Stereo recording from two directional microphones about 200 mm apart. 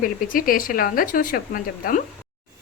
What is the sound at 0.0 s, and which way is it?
Speech, 45° left (ahead or behind).